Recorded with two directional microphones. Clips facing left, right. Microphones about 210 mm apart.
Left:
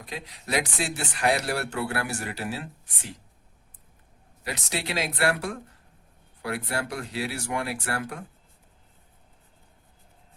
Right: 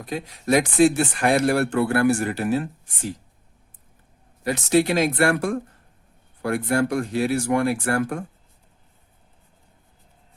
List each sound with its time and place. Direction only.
0.0 s speech: 45° right (ahead or behind)
4.4 s speech: 45° right (ahead or behind)